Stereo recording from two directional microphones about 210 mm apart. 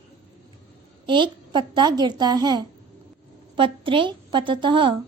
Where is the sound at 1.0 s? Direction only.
20° right (ahead or behind).